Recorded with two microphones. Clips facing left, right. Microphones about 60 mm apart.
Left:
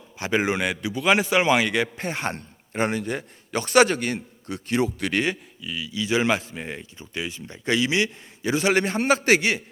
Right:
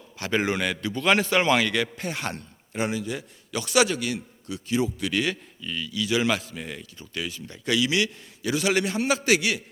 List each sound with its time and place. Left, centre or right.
0.2 s a man's voice: centre
2.0 s a man's voice: left
5.6 s a man's voice: centre
5.9 s a man's voice: left